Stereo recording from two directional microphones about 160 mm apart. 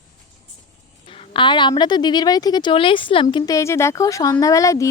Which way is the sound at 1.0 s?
35° left (ahead or behind).